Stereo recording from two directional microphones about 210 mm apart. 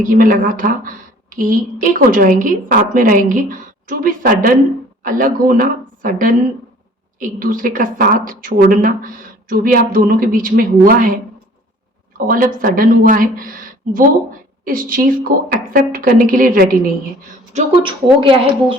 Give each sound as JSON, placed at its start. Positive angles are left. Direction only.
{"t": 0.0, "sound": "a woman's voice", "side_deg": -40}
{"t": 17.5, "sound": "a woman's voice", "side_deg": -25}